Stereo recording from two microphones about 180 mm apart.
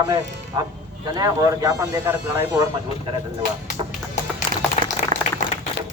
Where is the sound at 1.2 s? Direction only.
20° right (ahead or behind).